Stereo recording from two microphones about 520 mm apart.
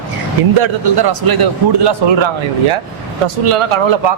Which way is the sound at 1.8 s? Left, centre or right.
Right.